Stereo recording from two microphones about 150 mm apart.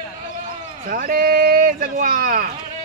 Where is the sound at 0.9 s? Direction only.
65° right (ahead or behind).